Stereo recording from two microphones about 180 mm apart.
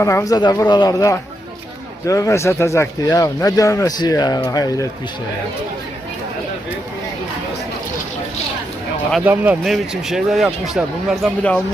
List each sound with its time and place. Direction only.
0.0 s speech: 15° left (ahead or behind)
9.1 s a man's voice: 10° right (ahead or behind)